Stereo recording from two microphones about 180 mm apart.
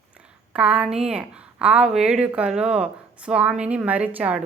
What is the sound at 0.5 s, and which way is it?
A woman's voice, 5° right (ahead or behind).